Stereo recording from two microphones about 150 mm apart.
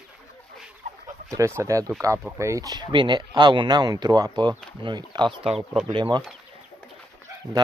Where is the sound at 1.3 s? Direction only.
20° right (ahead or behind).